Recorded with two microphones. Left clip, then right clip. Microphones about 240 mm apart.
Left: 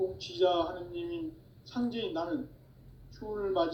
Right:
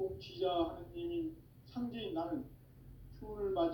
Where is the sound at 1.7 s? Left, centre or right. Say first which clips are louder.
Left 8 dB; left.